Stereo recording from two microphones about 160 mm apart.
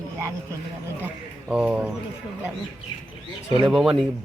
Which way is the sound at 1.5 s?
5° right (ahead or behind).